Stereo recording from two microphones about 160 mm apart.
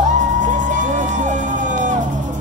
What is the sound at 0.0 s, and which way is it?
Music, 50° right (ahead or behind).